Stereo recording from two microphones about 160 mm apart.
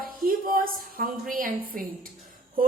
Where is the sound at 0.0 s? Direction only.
60° right (ahead or behind).